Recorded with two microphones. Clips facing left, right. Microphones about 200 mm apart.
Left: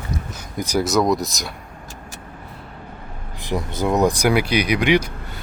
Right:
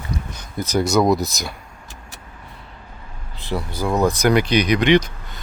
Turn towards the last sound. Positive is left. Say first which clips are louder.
# right 2 dB
turn(degrees=10)  # may be behind; listen again after turning